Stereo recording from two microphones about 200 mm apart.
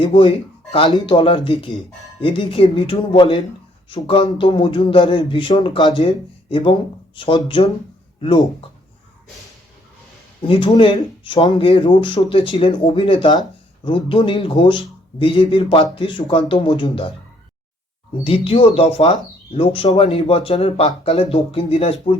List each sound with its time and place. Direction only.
0.0 s speech: 25° left (ahead or behind)
10.4 s speech: 25° left (ahead or behind)
18.2 s speech: 30° left (ahead or behind)